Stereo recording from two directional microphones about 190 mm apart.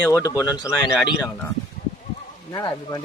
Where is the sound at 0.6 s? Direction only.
5° right (ahead or behind).